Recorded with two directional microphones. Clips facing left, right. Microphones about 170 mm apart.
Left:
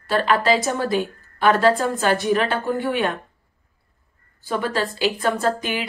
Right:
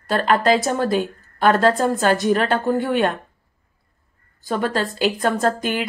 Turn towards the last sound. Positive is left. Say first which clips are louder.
# right 2 dB
turn(degrees=-45)  # may be behind; listen again after turning